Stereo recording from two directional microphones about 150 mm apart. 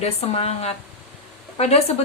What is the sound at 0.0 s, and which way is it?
A woman's voice, 45° left (ahead or behind).